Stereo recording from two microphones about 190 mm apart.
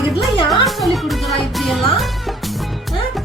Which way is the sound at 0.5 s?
Centre (ahead or behind).